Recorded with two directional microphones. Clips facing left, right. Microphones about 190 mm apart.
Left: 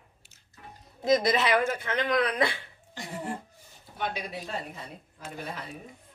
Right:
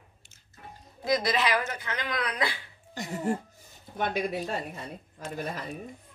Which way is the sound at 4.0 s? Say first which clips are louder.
Right 5 dB; 50° right (ahead or behind).